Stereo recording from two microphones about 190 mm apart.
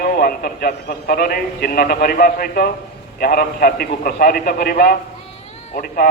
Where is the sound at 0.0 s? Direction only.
50° left (ahead or behind).